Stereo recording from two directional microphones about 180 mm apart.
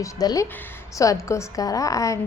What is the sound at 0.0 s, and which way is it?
A woman's voice, 20° left (ahead or behind).